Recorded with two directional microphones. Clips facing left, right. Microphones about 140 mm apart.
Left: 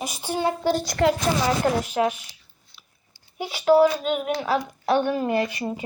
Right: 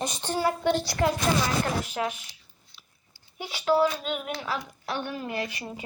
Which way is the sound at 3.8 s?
45° left (ahead or behind).